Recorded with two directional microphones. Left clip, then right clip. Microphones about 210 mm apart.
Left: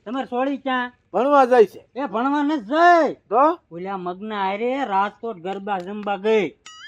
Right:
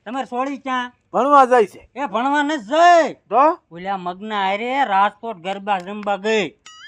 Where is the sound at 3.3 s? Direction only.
40° right (ahead or behind).